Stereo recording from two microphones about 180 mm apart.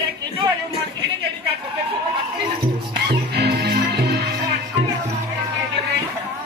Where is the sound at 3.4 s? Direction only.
60° right (ahead or behind).